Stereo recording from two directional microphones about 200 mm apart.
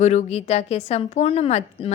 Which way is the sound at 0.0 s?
35° left (ahead or behind).